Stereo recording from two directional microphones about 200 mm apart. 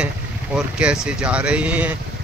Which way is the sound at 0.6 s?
5° right (ahead or behind).